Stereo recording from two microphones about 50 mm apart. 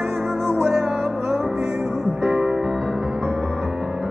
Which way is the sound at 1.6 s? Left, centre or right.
Right.